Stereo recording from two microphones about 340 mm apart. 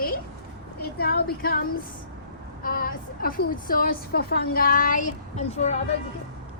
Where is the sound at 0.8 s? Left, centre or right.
Left.